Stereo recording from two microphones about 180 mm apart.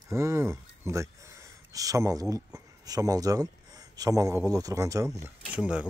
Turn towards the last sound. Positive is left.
turn(degrees=-5)  # may be behind; listen again after turning